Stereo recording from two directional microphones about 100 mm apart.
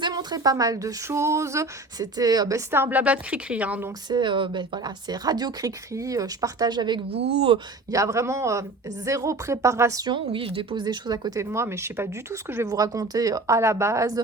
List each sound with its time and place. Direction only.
0.0 s speech: 45° right (ahead or behind); by 3.8 s 15° right (ahead or behind)
4.1 s speech: 50° right (ahead or behind)
7.1 s speech: 65° right (ahead or behind)
7.9 s speech: 30° right (ahead or behind)
10.1 s speech: 60° right (ahead or behind); by 14.1 s 30° right (ahead or behind)